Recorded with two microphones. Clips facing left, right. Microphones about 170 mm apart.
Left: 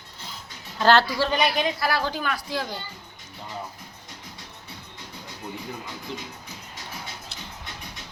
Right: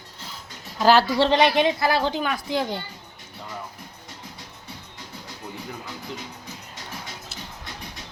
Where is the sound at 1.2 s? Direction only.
25° right (ahead or behind).